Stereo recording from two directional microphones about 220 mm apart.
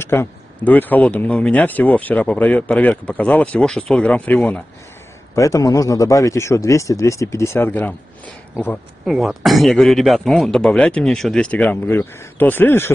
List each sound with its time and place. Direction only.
0.0 s speech: 10° left (ahead or behind)
9.0 s speech: centre (ahead or behind)